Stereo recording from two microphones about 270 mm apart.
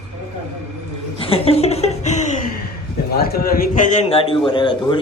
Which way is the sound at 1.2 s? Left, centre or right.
Left.